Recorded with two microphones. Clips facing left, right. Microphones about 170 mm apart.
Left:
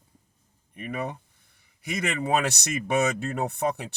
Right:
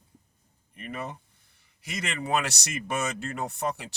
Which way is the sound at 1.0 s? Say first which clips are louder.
Left 4 dB; 60° left (ahead or behind).